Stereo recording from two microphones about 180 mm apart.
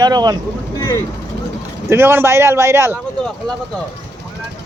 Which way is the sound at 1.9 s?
10° right (ahead or behind).